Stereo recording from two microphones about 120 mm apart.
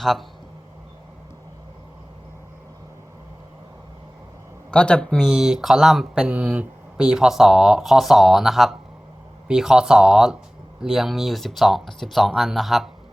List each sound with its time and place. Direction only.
0.0 s speech: centre (ahead or behind)
4.7 s speech: 10° left (ahead or behind)